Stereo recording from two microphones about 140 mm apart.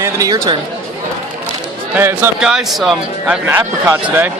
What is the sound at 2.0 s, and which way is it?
Speech, 15° right (ahead or behind).